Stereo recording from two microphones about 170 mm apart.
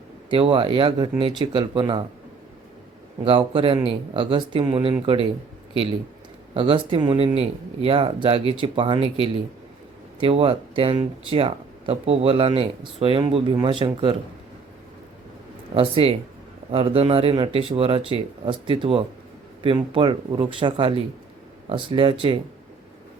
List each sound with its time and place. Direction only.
0.3 s speech: 30° right (ahead or behind)
3.2 s speech: 30° right (ahead or behind)
6.5 s speech: 35° right (ahead or behind)
15.7 s speech: 35° right (ahead or behind)